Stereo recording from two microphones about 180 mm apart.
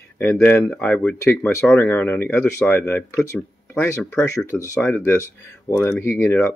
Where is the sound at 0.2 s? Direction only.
10° left (ahead or behind).